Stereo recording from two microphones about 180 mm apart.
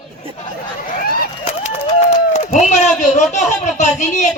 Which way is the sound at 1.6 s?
35° left (ahead or behind).